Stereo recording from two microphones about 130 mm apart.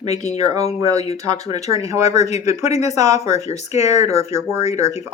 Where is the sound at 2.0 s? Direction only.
55° left (ahead or behind).